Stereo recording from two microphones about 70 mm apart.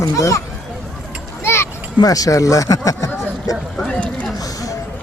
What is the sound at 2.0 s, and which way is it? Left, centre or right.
Speech, left.